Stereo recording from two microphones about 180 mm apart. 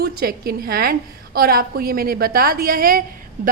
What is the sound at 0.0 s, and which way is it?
A woman's voice, 55° right (ahead or behind).